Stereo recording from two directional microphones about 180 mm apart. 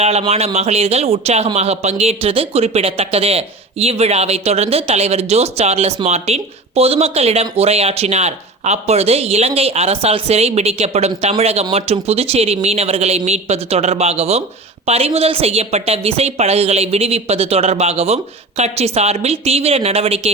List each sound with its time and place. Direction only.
0.0 s speech: 35° right (ahead or behind)